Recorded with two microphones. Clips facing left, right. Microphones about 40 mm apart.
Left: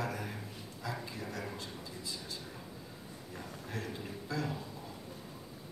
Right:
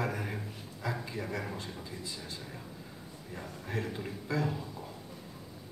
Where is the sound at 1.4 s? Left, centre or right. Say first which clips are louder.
Right 2 dB; centre.